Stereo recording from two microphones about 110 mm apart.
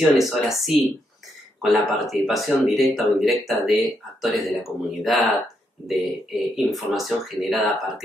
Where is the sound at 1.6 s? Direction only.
Centre (ahead or behind).